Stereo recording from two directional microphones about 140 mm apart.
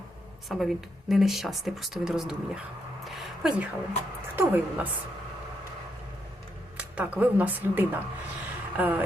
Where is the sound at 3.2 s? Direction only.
Centre (ahead or behind).